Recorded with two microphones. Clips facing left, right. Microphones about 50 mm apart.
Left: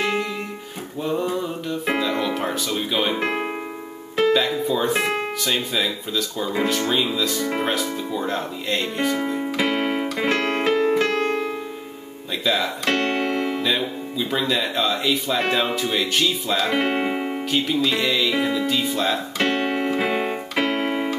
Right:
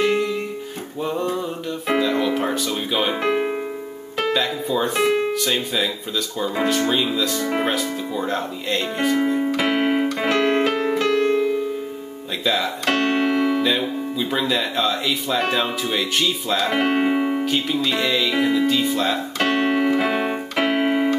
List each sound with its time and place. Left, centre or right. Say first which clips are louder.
1.0 s music: even; centre
4.3 s speech: even; centre
9.6 s music: even; centre
10.3 s music: right 2 dB; centre
11.1 s music: right 4 dB; left
12.4 s speech: right 1 dB; centre
19.5 s keyboard: right 4 dB; centre
20.5 s keyboard: right 3 dB; centre